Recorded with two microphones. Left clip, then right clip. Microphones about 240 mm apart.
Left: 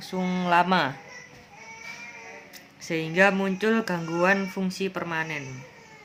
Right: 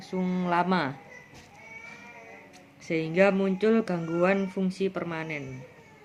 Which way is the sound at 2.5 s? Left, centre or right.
Left.